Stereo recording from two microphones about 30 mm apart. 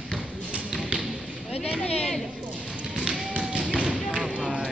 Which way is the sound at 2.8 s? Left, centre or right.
Centre.